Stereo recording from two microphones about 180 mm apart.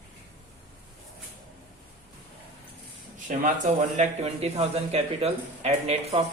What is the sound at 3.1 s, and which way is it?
Speech, 45° right (ahead or behind).